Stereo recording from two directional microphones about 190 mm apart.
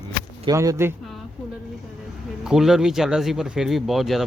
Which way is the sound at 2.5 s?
Centre (ahead or behind).